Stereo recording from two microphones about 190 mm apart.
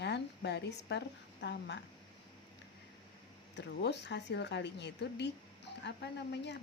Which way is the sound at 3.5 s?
65° left (ahead or behind).